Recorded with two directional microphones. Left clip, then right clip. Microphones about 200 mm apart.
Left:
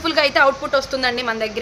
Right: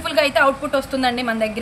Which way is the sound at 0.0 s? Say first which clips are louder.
Left 1 dB; 55° left (ahead or behind).